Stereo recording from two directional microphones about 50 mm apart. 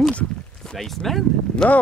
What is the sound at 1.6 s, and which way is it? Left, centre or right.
Speech, centre.